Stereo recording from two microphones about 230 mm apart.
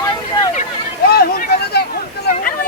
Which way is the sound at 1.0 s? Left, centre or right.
Left.